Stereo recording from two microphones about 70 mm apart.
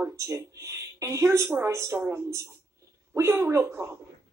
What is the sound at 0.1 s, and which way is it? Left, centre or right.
A woman's voice, right.